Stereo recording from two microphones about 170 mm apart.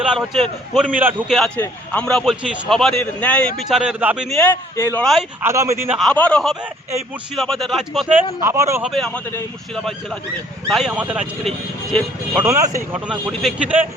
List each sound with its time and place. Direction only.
0.0 s a man's voice: 5° right (ahead or behind)
1.4 s speech: 10° left (ahead or behind); by 4.4 s 5° right (ahead or behind)
4.4 s a man's voice: 15° left (ahead or behind)
5.4 s a man's voice: 15° right (ahead or behind)
6.0 s speech: 5° left (ahead or behind)
8.4 s a man's voice: 15° right (ahead or behind)
8.8 s speech: centre (ahead or behind)
12.4 s a man's voice: 20° right (ahead or behind)
13.1 s a man's voice: 5° right (ahead or behind)